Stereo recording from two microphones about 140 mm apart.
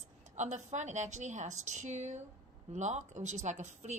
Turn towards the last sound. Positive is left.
turn(degrees=-55)  # may be behind; listen again after turning